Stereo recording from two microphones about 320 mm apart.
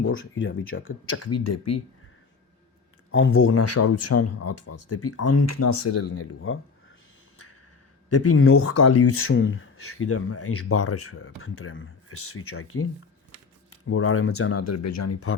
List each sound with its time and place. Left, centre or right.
0.0 s speech: left
3.1 s speech: left
8.1 s speech: left